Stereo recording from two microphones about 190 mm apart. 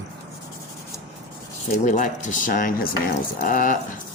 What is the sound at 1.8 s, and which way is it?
Speech, 40° left (ahead or behind).